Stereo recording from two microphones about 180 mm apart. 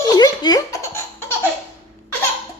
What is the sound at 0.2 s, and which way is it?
Laughter, 20° left (ahead or behind).